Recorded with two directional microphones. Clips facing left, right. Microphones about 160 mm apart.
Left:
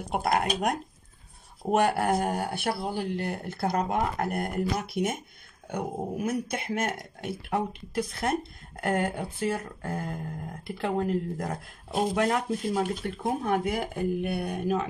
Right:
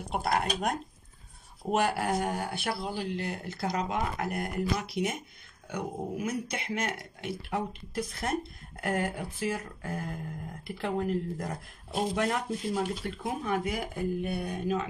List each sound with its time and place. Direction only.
0.1 s speech: 50° left (ahead or behind)